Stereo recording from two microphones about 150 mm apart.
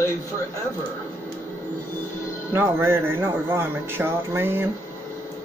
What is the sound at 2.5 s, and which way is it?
Speech, 15° right (ahead or behind).